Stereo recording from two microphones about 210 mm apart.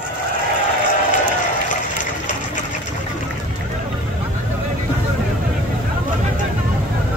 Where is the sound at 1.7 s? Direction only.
35° left (ahead or behind).